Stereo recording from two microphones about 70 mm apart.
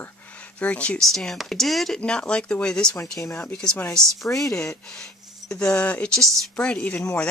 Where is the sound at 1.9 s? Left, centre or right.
Centre.